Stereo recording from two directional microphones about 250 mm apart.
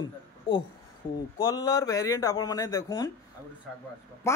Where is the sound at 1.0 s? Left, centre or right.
Left.